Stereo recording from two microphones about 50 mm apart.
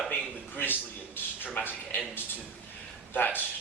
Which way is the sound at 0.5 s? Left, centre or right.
Left.